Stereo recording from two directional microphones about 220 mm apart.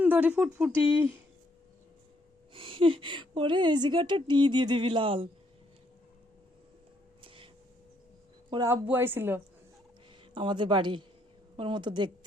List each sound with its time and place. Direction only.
0.0 s speech: 10° right (ahead or behind)
2.5 s a woman's voice: 25° right (ahead or behind)
7.2 s a sound: 25° right (ahead or behind)
8.4 s speech: 15° right (ahead or behind)
10.3 s a woman's voice: 20° right (ahead or behind)